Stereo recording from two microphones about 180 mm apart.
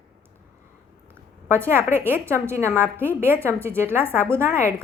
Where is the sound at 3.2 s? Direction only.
15° right (ahead or behind).